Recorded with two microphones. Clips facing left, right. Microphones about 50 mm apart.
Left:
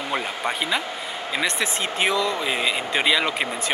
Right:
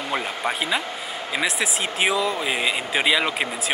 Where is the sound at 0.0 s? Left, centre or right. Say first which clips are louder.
Even; centre.